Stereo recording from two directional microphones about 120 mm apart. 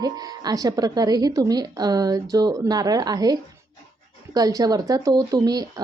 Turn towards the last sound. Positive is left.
turn(degrees=-30)  # may be behind; listen again after turning